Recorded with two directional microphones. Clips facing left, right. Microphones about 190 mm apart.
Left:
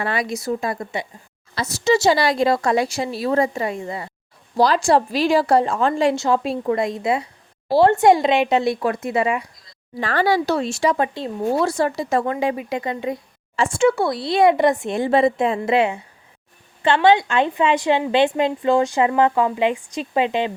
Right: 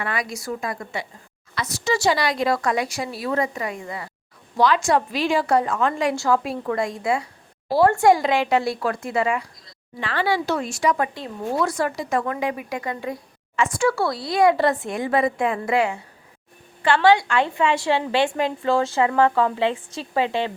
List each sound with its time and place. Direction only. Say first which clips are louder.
0.0 s a woman's voice: left 4 dB; 25° left (ahead or behind)
10.0 s a woman's voice: left 4 dB; 40° left (ahead or behind); by 20.5 s 20° left (ahead or behind)